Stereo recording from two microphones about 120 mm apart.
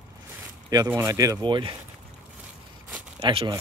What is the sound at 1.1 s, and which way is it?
Speech, 30° right (ahead or behind).